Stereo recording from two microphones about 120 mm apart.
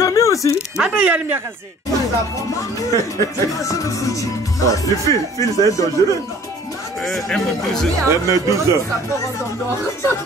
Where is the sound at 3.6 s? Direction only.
25° left (ahead or behind).